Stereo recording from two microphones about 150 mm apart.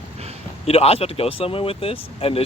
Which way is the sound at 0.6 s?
40° left (ahead or behind).